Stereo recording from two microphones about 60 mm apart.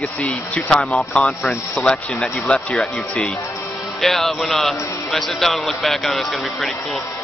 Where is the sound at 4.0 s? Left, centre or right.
Centre.